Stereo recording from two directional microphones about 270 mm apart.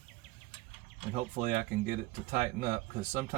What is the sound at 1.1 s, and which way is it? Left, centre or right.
Speech, right.